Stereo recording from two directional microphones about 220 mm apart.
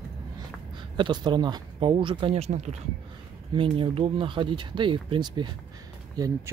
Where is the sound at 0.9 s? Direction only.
20° right (ahead or behind).